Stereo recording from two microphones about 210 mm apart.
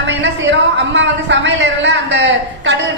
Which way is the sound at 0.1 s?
60° right (ahead or behind).